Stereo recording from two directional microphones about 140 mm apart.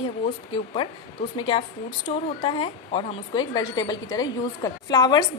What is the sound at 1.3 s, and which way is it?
Speech, 35° left (ahead or behind).